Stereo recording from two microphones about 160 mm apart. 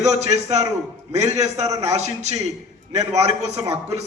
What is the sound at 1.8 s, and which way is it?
A man's voice, 45° right (ahead or behind).